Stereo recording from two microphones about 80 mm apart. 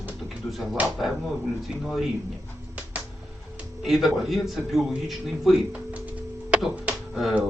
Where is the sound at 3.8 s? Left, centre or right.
Centre.